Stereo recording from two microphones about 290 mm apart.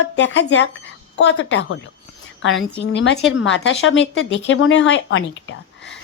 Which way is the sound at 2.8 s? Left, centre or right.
Left.